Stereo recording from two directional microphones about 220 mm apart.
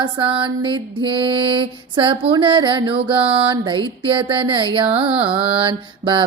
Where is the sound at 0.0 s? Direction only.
20° right (ahead or behind).